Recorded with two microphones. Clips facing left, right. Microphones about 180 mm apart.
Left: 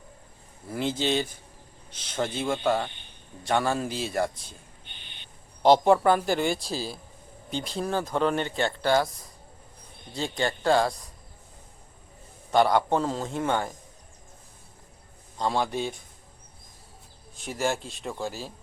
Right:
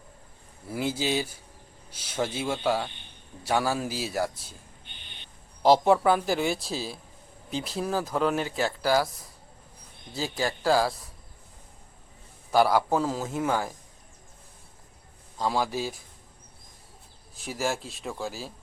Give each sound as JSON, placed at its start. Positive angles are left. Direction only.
{"t": 0.7, "sound": "a man's voice", "side_deg": -5}
{"t": 5.6, "sound": "speech", "side_deg": 0}
{"t": 10.1, "sound": "speech", "side_deg": -5}
{"t": 12.5, "sound": "speech", "side_deg": -5}
{"t": 15.4, "sound": "speech", "side_deg": -5}
{"t": 17.3, "sound": "speech", "side_deg": 0}